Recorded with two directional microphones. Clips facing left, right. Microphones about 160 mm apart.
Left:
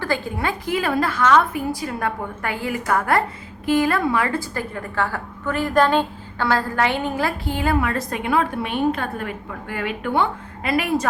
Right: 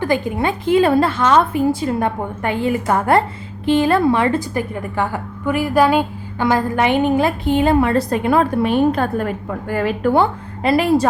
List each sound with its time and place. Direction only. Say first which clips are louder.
0.0 s a woman's voice: right 6 dB; 20° right (ahead or behind)